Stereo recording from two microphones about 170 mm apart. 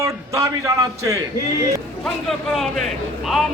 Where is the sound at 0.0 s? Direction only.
20° right (ahead or behind).